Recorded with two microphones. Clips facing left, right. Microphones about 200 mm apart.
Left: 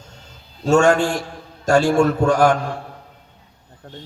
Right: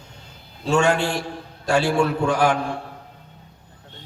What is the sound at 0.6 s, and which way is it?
A man's voice, 45° left (ahead or behind).